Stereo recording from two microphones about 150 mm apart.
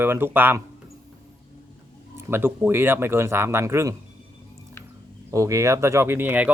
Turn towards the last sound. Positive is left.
turn(degrees=-10)  # may be behind; listen again after turning